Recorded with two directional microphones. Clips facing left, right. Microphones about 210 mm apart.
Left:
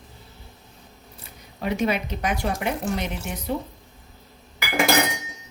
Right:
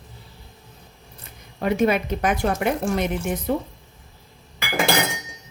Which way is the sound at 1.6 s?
50° right (ahead or behind).